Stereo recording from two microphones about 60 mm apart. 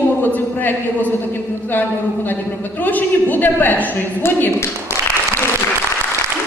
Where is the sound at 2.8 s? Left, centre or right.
Left.